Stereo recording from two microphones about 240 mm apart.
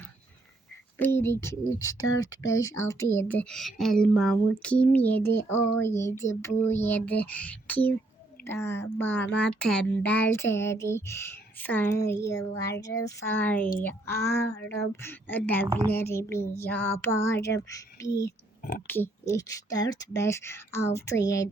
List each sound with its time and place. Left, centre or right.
0.9 s speech: centre
2.0 s speech: left
2.2 s speech: centre
15.6 s a woman's voice: centre
16.0 s speech: centre